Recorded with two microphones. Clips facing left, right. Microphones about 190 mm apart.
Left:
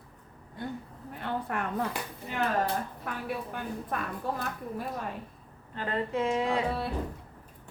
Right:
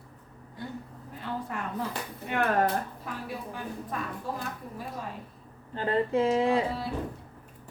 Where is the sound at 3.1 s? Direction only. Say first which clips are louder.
Left 1 dB; 60° left (ahead or behind).